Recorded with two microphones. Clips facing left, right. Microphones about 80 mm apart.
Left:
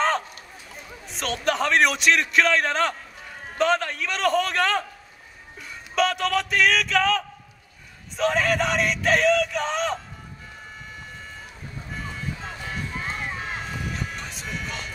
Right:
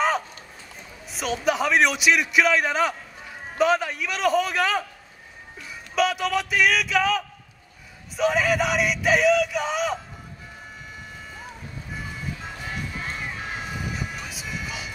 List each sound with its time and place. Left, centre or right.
1.0 s a man's voice: centre
11.9 s music: centre